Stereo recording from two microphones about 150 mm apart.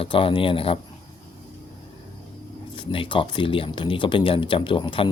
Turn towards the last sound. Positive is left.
turn(degrees=35)  # may be behind; listen again after turning